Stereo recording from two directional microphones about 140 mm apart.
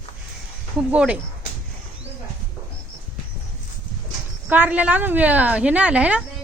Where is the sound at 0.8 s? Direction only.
5° right (ahead or behind).